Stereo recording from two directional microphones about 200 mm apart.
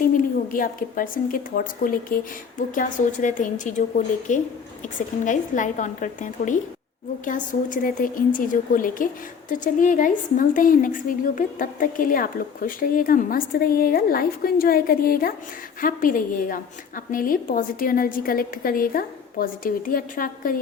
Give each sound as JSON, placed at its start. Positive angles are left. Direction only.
{"t": 0.0, "sound": "a woman's voice", "side_deg": 45}